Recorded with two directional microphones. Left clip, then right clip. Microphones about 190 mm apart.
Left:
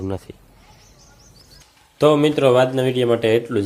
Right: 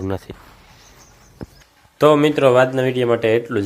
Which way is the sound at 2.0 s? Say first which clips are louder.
Right 2 dB; 10° left (ahead or behind).